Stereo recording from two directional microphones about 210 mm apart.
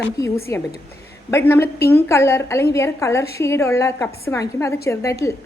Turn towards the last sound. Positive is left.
turn(degrees=15)  # may be behind; listen again after turning